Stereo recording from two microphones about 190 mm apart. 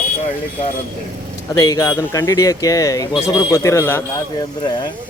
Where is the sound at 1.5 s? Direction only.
20° left (ahead or behind).